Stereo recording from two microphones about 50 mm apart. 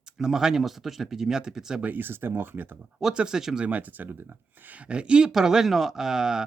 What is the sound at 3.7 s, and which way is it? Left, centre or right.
Speech, right.